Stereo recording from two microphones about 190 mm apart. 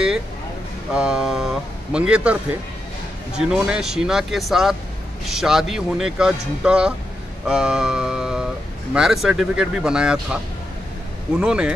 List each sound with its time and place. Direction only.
0.9 s speech: 5° right (ahead or behind)
3.3 s speech: 5° right (ahead or behind)
7.4 s mantra: 5° right (ahead or behind)
8.9 s speech: centre (ahead or behind)